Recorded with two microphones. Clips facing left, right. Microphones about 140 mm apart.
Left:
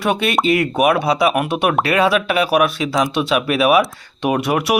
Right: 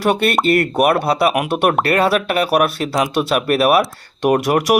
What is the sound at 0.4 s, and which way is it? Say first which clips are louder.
Speech: right 1 dB; 60° right (ahead or behind).